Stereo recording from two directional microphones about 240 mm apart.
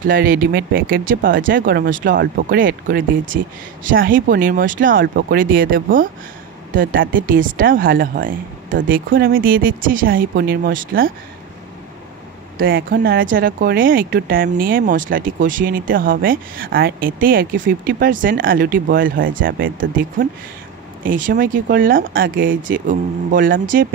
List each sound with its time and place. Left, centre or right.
0.0 s speech: right
12.7 s speech: right